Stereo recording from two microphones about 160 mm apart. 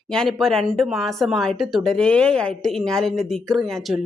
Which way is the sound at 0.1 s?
5° left (ahead or behind).